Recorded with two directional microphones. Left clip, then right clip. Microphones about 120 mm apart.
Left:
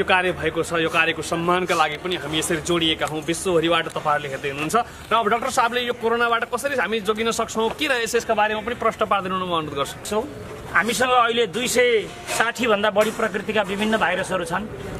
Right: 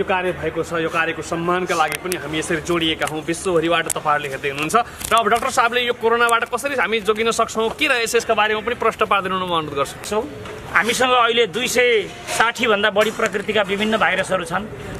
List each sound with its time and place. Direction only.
0.0 s speech: 50° left (ahead or behind)
0.9 s speech: 50° left (ahead or behind)
1.4 s speech: 35° left (ahead or behind)
2.4 s speech: 15° left (ahead or behind); by 14.6 s centre (ahead or behind)